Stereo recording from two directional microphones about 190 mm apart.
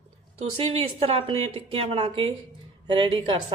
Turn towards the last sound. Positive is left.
turn(degrees=-25)  # may be behind; listen again after turning